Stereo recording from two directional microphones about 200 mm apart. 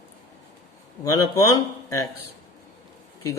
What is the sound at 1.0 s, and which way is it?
Speech, 15° left (ahead or behind).